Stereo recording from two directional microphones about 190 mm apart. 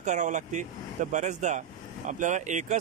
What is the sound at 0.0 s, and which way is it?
Speech, 40° right (ahead or behind).